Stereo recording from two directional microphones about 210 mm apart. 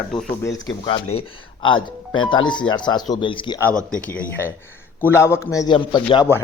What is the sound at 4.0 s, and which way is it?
A man's voice, 5° left (ahead or behind).